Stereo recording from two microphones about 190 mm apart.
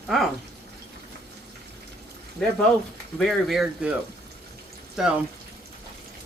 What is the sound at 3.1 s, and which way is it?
Speech, centre (ahead or behind).